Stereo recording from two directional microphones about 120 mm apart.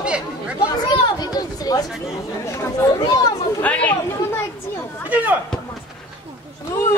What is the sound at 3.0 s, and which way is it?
Chatter, 35° left (ahead or behind).